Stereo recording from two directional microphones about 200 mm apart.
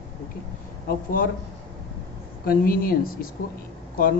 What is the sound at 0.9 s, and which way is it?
Speech, 45° left (ahead or behind).